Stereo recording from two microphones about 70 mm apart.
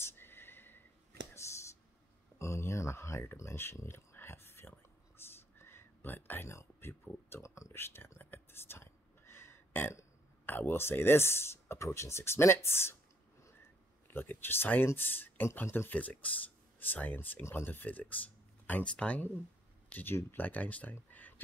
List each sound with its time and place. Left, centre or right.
0.0 s a sound: left
1.4 s whispering: left
2.3 s a sound: left
6.4 s speech: left
7.4 s speech: left
7.8 s whispering: left
10.4 s speech: left
14.0 s speech: left